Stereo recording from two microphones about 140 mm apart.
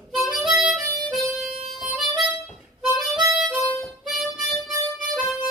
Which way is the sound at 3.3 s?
Centre (ahead or behind).